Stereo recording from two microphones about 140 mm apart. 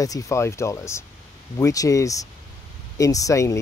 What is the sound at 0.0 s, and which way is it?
Speech, 25° left (ahead or behind).